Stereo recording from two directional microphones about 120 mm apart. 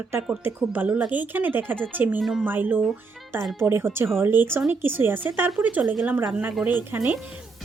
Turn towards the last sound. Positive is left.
turn(degrees=-15)  # may be behind; listen again after turning